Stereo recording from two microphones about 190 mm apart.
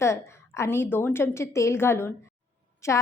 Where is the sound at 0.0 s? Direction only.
15° left (ahead or behind).